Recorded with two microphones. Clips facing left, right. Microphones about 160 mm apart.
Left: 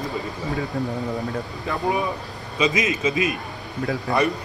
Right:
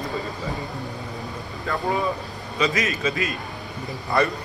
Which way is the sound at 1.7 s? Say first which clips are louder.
Even; 20° left (ahead or behind).